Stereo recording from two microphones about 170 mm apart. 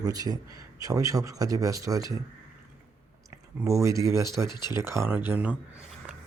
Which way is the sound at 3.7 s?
20° right (ahead or behind).